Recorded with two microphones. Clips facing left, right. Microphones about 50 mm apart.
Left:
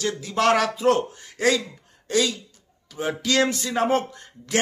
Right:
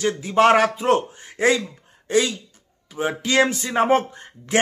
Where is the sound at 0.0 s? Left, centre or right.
Right.